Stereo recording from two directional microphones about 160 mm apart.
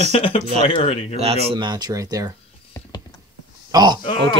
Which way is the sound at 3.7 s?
25° right (ahead or behind).